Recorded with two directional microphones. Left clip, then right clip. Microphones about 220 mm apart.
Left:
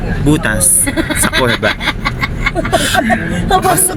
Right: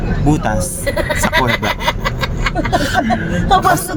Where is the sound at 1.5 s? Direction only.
45° right (ahead or behind).